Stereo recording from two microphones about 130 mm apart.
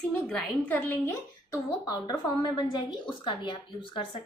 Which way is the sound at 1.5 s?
30° left (ahead or behind).